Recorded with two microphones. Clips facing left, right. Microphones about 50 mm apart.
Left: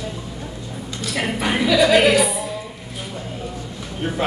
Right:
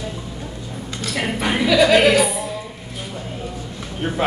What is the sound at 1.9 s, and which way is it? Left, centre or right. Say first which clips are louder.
Music: even; centre.